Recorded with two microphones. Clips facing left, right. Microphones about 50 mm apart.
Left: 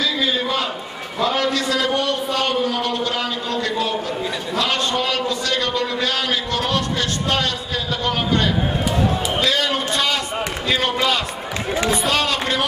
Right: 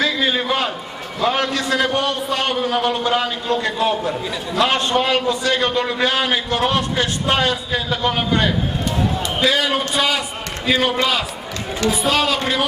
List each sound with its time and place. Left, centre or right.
0.0 s a sound: right
1.2 s a man's voice: right
3.4 s a man's voice: right; by 12.6 s centre